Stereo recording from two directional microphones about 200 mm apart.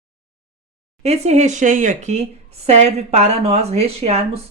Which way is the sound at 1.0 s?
30° right (ahead or behind).